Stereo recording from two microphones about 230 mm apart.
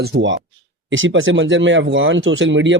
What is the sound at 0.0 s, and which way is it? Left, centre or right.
Speech, right.